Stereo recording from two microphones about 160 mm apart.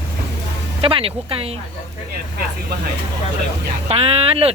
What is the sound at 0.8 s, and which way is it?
Speech, 35° right (ahead or behind).